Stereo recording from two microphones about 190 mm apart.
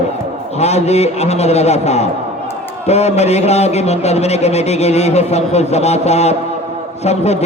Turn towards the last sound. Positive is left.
turn(degrees=35)  # may be behind; listen again after turning